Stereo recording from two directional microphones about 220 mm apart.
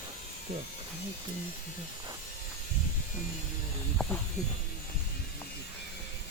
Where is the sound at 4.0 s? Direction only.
Centre (ahead or behind).